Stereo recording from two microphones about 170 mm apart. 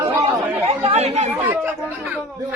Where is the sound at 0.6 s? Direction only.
35° right (ahead or behind).